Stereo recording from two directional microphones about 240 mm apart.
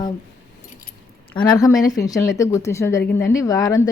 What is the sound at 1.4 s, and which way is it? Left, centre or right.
A woman's voice, centre.